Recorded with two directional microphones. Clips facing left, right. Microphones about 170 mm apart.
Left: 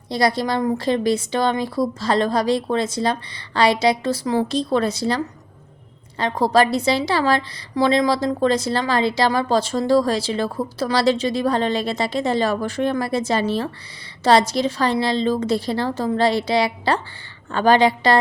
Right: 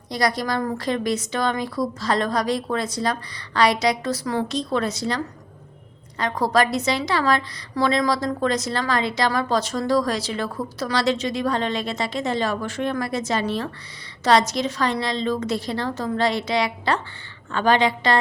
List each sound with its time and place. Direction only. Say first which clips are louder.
0.1 s a woman's voice: left 3 dB; 25° left (ahead or behind)